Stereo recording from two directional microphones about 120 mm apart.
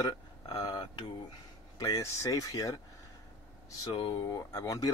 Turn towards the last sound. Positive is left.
turn(degrees=30)  # may be behind; listen again after turning